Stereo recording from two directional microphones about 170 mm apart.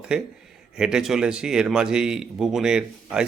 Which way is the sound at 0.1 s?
5° right (ahead or behind).